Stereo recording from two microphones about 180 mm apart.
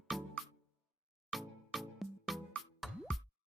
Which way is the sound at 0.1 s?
Centre (ahead or behind).